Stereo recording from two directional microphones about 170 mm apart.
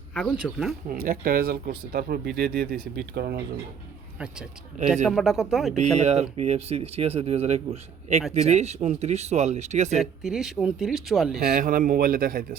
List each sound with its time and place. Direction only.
0.1 s speech: 5° left (ahead or behind)
0.9 s speech: 60° right (ahead or behind)
5.0 s speech: centre (ahead or behind)
5.7 s a man's voice: 40° right (ahead or behind)
10.0 s speech: 5° right (ahead or behind)
11.4 s speech: 55° right (ahead or behind)